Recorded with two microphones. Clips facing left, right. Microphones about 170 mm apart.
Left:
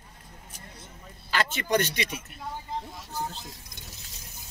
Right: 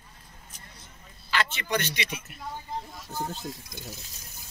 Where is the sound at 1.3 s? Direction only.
45° left (ahead or behind).